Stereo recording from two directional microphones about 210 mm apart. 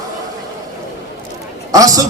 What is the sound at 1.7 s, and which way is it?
Speech, 15° right (ahead or behind).